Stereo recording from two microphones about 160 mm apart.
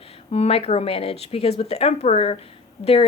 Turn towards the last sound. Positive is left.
turn(degrees=40)  # may be behind; listen again after turning